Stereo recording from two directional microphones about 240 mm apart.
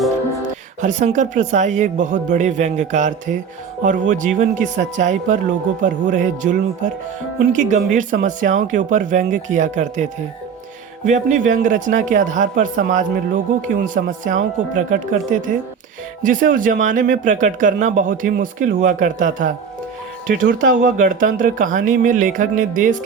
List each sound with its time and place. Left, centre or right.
0.8 s speech: right
11.1 s speech: right